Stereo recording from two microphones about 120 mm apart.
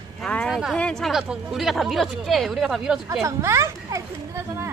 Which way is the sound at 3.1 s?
25° right (ahead or behind).